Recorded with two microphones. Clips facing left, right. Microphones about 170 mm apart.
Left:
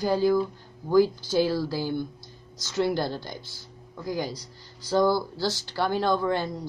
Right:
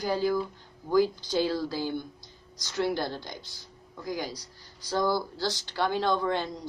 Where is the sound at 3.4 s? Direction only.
15° right (ahead or behind).